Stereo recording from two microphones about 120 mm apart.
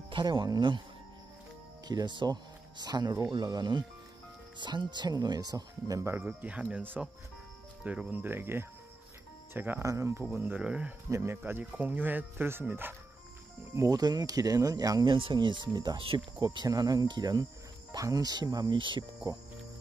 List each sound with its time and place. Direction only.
0.1 s speech: 40° right (ahead or behind)
1.9 s speech: 35° right (ahead or behind)
6.1 s speech: 10° right (ahead or behind)
11.1 s speech: 25° right (ahead or behind)
13.7 s speech: 35° right (ahead or behind)
15.0 s speech: 45° right (ahead or behind)